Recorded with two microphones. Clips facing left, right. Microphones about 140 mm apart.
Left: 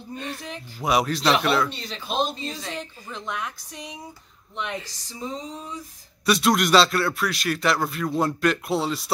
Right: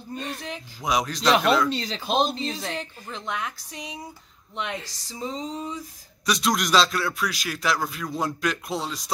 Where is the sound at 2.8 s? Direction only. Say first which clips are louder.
Even; centre (ahead or behind).